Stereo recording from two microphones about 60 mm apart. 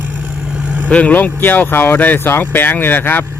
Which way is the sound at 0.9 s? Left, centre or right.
Left.